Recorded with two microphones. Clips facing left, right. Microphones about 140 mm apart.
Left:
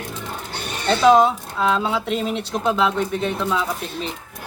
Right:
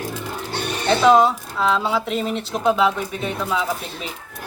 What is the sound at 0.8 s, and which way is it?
Speech, centre (ahead or behind).